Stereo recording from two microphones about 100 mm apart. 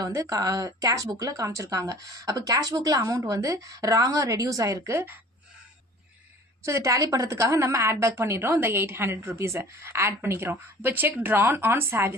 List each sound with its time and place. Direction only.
0.0 s a woman's voice: 35° right (ahead or behind)
6.6 s a woman's voice: 30° right (ahead or behind)